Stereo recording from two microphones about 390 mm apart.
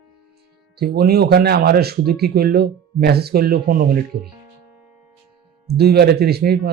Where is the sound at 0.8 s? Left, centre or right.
Right.